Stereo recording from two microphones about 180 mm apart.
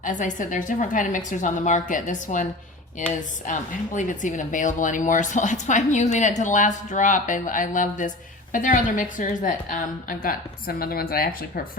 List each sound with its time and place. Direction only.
0.0 s speech: 45° left (ahead or behind)